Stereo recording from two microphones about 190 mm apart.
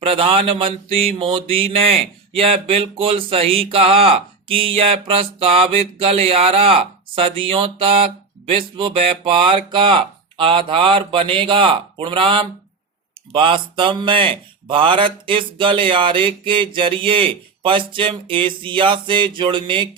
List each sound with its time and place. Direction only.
0.0 s mantra: 30° right (ahead or behind)